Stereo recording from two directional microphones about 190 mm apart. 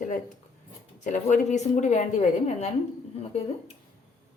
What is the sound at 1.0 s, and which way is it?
A woman's voice, 40° left (ahead or behind).